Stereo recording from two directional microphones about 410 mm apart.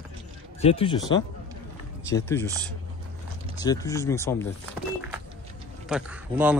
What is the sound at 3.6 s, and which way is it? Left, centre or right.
Speech, centre.